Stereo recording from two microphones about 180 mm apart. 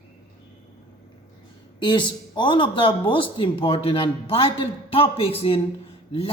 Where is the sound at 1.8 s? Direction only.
25° left (ahead or behind).